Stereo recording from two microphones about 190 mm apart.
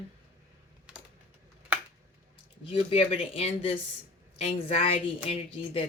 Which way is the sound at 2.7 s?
30° left (ahead or behind).